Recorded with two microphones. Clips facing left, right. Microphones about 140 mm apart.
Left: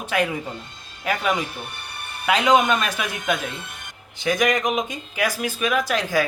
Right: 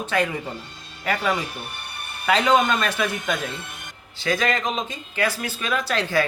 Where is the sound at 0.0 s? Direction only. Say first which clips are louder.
Even; 10° left (ahead or behind).